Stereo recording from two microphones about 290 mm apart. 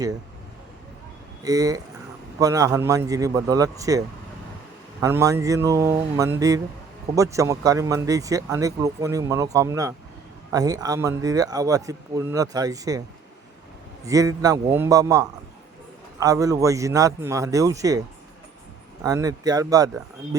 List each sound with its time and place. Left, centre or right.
1.5 s speech: centre
14.0 s speech: centre
19.0 s speech: centre